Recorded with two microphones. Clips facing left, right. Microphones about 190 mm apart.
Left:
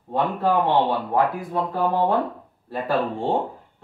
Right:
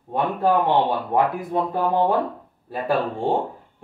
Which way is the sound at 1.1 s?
20° right (ahead or behind).